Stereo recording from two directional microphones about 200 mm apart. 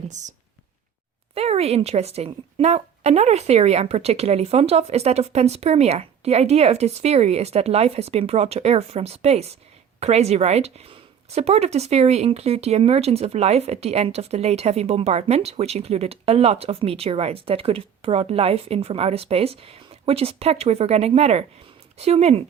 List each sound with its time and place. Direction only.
0.1 s speech: 35° right (ahead or behind)
1.4 s speech: 30° right (ahead or behind)